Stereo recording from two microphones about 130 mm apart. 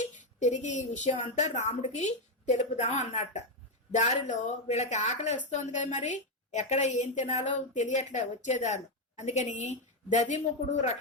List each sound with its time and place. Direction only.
0.0 s speech: 70° left (ahead or behind)